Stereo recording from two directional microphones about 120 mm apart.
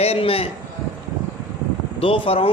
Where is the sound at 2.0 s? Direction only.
50° left (ahead or behind).